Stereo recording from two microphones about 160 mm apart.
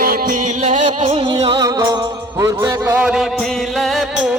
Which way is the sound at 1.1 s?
35° right (ahead or behind).